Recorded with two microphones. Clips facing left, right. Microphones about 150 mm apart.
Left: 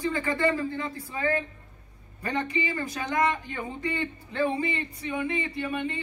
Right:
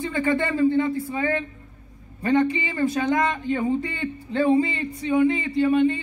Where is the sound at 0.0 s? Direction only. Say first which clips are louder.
Right 3 dB; 25° right (ahead or behind).